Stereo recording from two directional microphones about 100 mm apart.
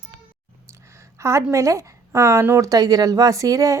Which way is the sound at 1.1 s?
30° right (ahead or behind).